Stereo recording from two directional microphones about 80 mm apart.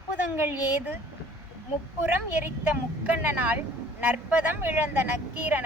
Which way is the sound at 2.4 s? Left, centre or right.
Right.